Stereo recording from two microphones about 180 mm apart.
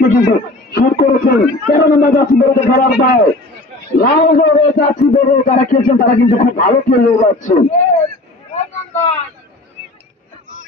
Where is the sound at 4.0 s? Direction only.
45° left (ahead or behind).